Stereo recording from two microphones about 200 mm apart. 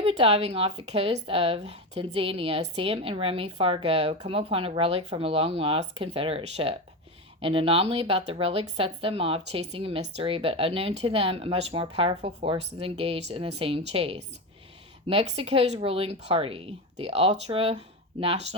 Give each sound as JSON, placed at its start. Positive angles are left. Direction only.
{"t": 0.0, "sound": "speech", "side_deg": -30}